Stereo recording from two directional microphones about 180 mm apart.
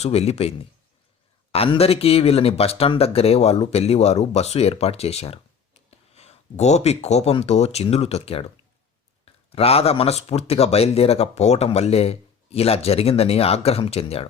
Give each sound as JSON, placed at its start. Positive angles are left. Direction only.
{"t": 0.0, "sound": "speech", "side_deg": 35}
{"t": 9.5, "sound": "speech", "side_deg": 35}